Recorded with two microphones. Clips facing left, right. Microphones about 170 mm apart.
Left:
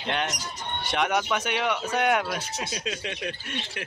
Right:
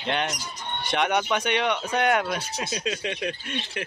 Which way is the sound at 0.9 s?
Centre (ahead or behind).